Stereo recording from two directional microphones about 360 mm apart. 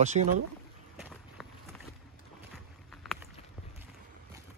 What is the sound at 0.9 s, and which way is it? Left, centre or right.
Run, centre.